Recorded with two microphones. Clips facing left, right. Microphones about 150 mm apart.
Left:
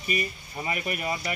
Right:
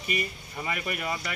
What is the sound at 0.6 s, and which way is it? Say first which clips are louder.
Speech: left 2 dB; 20° left (ahead or behind).